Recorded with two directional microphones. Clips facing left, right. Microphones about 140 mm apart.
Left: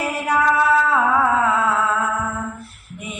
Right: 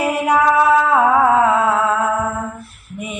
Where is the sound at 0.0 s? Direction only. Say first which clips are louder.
Right 4 dB; 15° right (ahead or behind).